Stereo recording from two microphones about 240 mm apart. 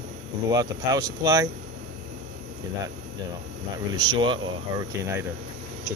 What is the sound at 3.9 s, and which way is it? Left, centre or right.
Speech, centre.